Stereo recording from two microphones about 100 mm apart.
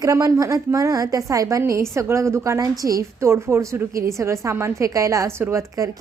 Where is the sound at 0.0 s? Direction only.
30° right (ahead or behind).